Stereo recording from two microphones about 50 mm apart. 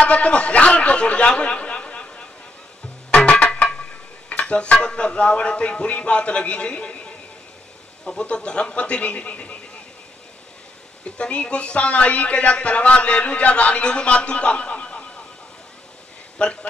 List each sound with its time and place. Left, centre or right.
0.0 s a sound: left
3.1 s music: left
4.3 s a sound: left
4.7 s speech: left
11.1 s speech: left
16.4 s speech: left